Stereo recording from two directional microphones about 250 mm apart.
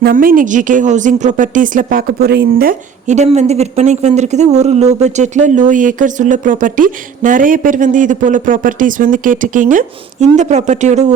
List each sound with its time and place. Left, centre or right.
0.0 s a woman's voice: right